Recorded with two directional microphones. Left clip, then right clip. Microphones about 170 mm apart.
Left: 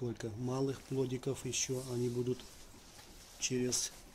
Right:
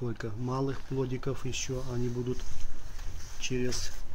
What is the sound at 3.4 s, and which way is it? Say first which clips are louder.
Speech: right 2 dB; centre (ahead or behind).